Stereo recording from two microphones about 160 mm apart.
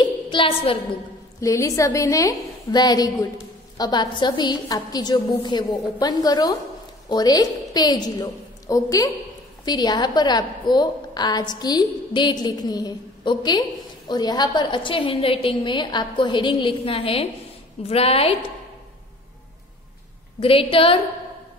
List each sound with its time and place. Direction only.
0.0 s a sound: 30° left (ahead or behind)
1.4 s a woman's voice: 20° left (ahead or behind); by 18.3 s 40° left (ahead or behind)
20.3 s a woman's voice: 35° left (ahead or behind)